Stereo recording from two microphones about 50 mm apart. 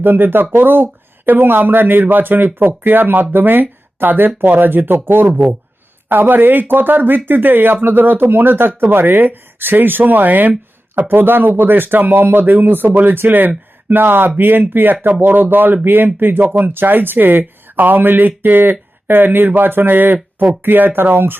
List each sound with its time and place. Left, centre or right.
0.0 s speech: right